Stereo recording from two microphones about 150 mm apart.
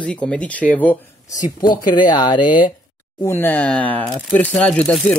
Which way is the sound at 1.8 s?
30° left (ahead or behind).